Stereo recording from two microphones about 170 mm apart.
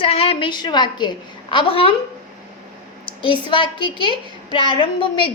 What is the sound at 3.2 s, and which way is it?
A woman's voice, 30° left (ahead or behind).